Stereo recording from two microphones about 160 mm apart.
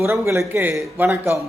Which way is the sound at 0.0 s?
15° right (ahead or behind).